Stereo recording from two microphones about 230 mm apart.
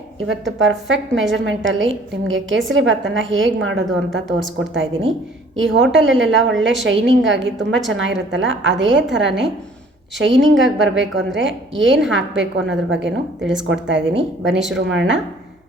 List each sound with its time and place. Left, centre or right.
0.3 s a woman's voice: right